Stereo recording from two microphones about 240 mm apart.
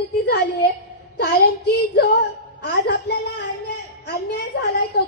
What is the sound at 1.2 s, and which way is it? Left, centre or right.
A woman's voice, left.